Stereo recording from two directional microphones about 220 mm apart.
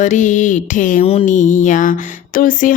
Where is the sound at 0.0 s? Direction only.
35° left (ahead or behind).